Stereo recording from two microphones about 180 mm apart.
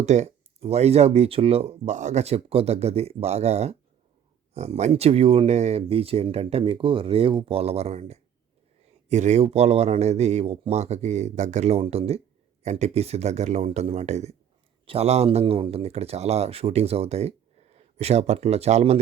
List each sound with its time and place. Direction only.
0.0 s speech: 40° right (ahead or behind)